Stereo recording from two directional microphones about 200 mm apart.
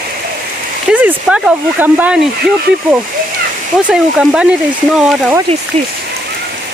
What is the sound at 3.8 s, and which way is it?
Speech, 5° right (ahead or behind).